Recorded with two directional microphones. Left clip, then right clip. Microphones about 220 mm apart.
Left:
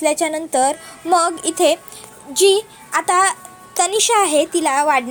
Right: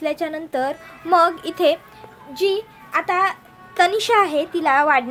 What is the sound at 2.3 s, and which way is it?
A woman's voice, 25° left (ahead or behind).